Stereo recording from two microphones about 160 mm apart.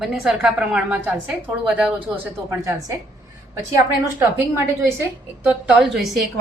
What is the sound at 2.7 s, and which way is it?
Speech, 20° right (ahead or behind).